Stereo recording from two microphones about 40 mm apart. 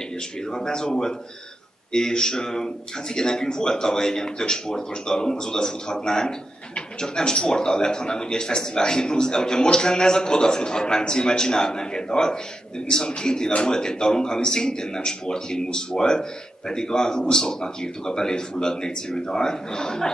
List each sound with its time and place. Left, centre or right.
0.5 s a man's voice: centre